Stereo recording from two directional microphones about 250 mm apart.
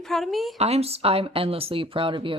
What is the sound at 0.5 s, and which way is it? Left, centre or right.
Speech, right.